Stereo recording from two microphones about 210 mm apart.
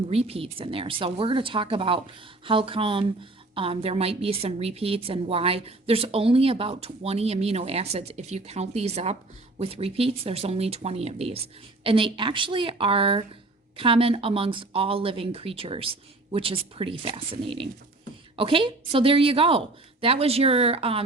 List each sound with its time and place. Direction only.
0.1 s a woman's voice: 30° right (ahead or behind)